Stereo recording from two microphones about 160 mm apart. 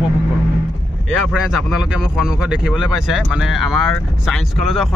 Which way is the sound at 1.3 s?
5° right (ahead or behind).